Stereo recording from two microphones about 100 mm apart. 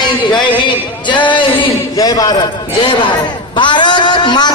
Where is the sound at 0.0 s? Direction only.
50° left (ahead or behind).